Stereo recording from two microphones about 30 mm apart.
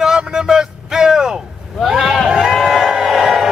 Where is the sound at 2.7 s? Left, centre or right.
Centre.